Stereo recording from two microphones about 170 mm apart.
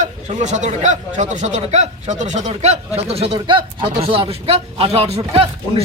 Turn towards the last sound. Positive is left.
turn(degrees=-35)  # may be behind; listen again after turning